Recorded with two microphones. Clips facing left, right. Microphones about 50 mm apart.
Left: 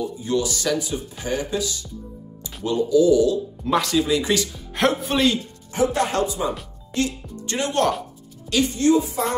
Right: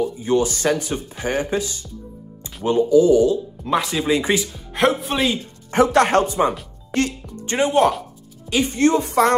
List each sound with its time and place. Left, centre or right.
0.0 s speech: right
3.6 s speech: centre
3.9 s speech: right
4.4 s speech: centre
5.9 s speech: right
6.1 s a woman's voice: right
7.4 s speech: right
7.7 s speech: centre
8.6 s a woman's voice: right
9.0 s speech: right